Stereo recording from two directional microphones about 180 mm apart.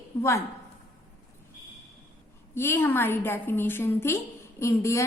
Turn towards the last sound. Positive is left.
turn(degrees=15)  # may be behind; listen again after turning